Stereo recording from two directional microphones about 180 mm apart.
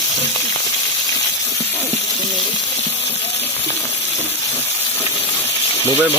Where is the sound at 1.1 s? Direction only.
15° left (ahead or behind).